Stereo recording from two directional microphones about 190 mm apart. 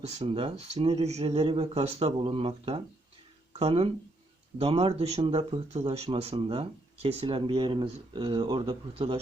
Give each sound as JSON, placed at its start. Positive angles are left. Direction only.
{"t": 0.0, "sound": "speech", "side_deg": -35}